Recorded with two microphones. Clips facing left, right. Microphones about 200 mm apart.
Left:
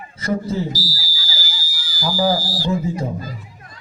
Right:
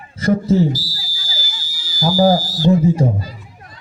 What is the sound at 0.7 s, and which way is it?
Speech, 25° right (ahead or behind).